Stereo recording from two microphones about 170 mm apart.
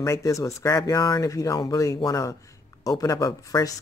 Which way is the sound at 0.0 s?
20° left (ahead or behind).